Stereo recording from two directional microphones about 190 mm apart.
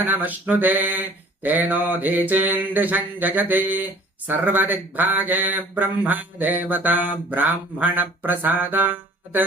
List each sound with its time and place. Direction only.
0.0 s speech: 10° right (ahead or behind)